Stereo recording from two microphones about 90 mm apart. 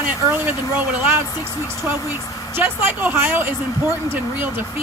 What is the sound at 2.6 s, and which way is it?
Speech, 20° right (ahead or behind).